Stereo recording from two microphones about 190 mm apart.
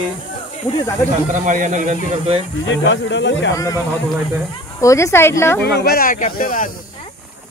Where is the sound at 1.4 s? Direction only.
40° right (ahead or behind).